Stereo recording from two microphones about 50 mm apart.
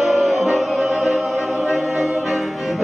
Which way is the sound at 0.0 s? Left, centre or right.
Centre.